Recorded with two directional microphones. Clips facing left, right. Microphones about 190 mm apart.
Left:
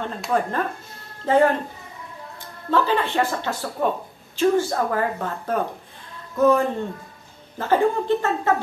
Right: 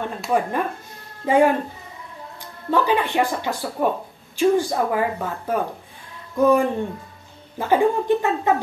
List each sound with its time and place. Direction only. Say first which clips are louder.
0.3 s speech: right 1 dB; 15° right (ahead or behind)
2.7 s speech: right 1 dB; 15° right (ahead or behind)